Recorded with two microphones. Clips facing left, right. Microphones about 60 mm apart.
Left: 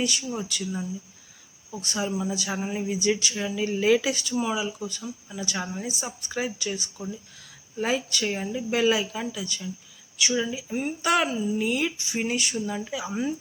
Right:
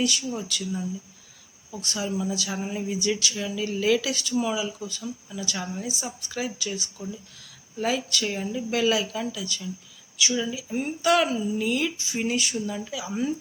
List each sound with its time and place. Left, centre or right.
0.0 s speech: centre
7.8 s speech: centre
10.2 s speech: centre